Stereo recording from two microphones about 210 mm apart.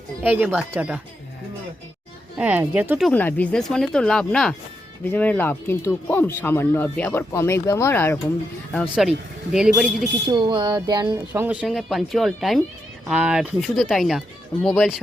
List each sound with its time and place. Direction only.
0.2 s speech: 10° right (ahead or behind)
2.4 s speech: 5° right (ahead or behind)
3.1 s speech: 10° left (ahead or behind)
8.7 s speech: centre (ahead or behind)
10.2 s music: 20° right (ahead or behind)
11.3 s speech: 5° right (ahead or behind)